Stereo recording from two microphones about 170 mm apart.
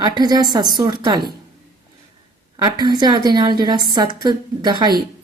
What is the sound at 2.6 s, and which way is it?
A woman's voice, 25° right (ahead or behind).